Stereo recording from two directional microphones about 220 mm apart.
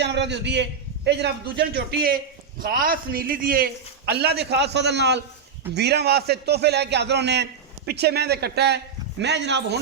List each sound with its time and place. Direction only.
0.0 s a man's voice: 50° right (ahead or behind)